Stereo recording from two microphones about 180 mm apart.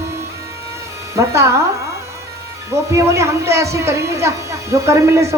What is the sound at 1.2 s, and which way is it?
Speech, 15° right (ahead or behind).